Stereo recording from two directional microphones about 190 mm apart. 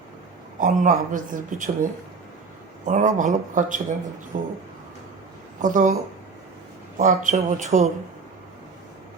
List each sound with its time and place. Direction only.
0.6 s speech: 40° right (ahead or behind)
5.6 s speech: 45° right (ahead or behind)
7.0 s speech: 40° right (ahead or behind)